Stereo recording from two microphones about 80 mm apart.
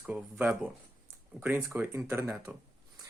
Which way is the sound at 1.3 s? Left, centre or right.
Right.